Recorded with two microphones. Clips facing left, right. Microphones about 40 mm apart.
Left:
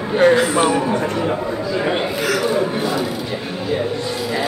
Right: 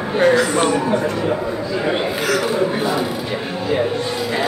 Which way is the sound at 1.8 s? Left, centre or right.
Centre.